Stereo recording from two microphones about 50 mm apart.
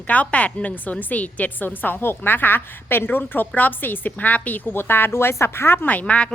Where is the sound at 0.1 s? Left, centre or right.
Left.